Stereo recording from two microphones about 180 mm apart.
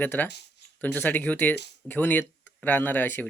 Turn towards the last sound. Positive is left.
turn(degrees=10)  # may be behind; listen again after turning